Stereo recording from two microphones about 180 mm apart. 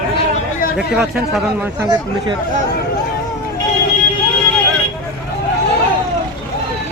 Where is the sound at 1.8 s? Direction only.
25° right (ahead or behind).